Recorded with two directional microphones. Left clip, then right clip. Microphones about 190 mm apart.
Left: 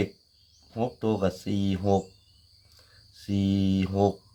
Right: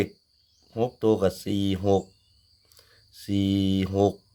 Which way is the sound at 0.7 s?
45° right (ahead or behind).